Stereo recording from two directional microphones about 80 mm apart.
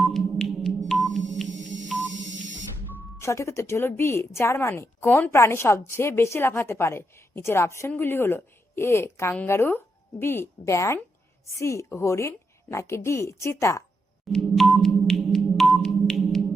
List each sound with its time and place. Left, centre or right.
0.0 s sonar: centre
0.9 s music: centre
3.2 s a woman's voice: left
14.3 s sonar: centre